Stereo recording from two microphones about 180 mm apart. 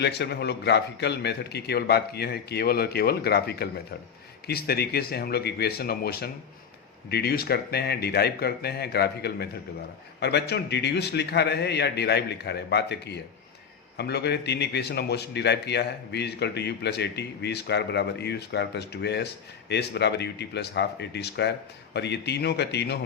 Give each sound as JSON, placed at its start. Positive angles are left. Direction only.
{"t": 0.0, "sound": "a man's voice", "side_deg": 70}